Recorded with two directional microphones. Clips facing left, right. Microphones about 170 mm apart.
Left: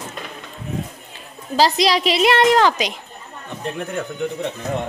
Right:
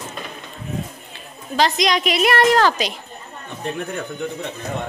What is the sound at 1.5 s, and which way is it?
A woman's voice, 35° left (ahead or behind).